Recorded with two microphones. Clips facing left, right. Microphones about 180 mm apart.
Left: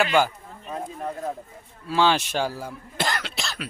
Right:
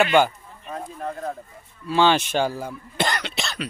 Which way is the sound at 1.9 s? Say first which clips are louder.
Right 2 dB; centre (ahead or behind).